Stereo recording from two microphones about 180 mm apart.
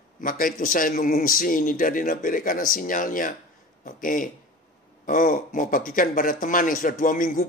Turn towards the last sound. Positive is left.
turn(degrees=50)  # may be behind; listen again after turning